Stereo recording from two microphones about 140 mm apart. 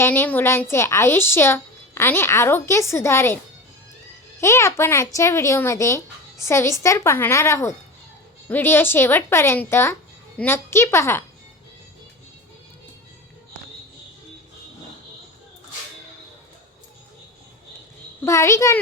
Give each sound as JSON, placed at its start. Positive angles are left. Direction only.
{"t": 0.0, "sound": "a woman's voice", "side_deg": 15}
{"t": 4.4, "sound": "a woman's voice", "side_deg": 20}
{"t": 18.3, "sound": "speech", "side_deg": 20}